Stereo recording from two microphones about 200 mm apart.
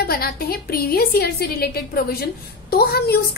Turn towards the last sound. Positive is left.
turn(degrees=50)  # may be behind; listen again after turning